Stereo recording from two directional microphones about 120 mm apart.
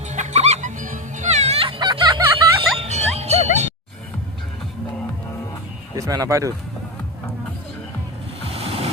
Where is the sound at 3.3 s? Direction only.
70° left (ahead or behind).